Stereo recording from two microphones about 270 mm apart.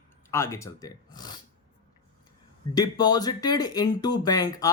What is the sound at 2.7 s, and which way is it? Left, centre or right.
Speech, centre.